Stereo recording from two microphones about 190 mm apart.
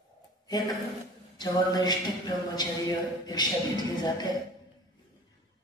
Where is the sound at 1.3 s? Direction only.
20° left (ahead or behind).